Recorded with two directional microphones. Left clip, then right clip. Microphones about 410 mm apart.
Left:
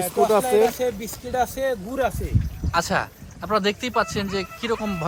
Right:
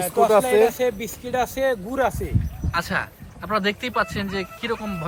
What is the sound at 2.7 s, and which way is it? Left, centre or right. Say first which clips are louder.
Speech: left 2 dB; centre.